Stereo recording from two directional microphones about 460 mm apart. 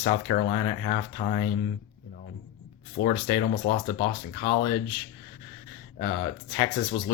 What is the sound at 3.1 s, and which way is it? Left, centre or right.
Speech, centre.